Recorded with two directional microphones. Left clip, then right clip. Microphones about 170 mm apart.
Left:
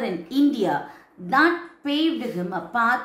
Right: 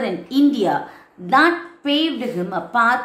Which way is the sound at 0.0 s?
20° right (ahead or behind).